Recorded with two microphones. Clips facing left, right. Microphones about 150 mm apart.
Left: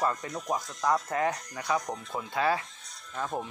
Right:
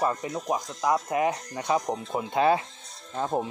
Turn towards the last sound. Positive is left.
turn(degrees=-30)  # may be behind; listen again after turning